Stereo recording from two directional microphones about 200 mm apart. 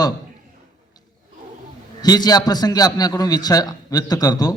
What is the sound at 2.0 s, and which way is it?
A man's voice, 20° left (ahead or behind).